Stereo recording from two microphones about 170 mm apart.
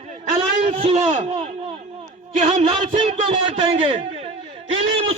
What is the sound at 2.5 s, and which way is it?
A man's voice, 35° right (ahead or behind).